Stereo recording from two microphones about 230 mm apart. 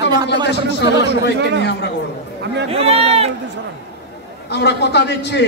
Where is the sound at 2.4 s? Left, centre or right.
Right.